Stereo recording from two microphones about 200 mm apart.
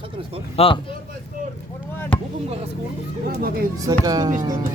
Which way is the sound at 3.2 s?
50° right (ahead or behind).